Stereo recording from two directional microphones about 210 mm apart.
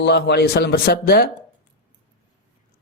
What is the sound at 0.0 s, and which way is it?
Speech, 50° left (ahead or behind).